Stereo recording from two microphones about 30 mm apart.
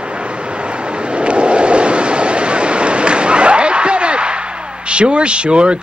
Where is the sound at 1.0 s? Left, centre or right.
Right.